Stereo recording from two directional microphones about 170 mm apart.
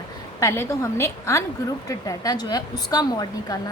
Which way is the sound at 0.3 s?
15° left (ahead or behind).